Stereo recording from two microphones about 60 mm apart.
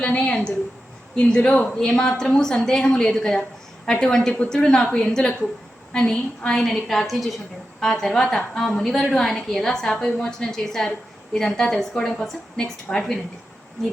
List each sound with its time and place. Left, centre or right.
0.0 s a woman's voice: centre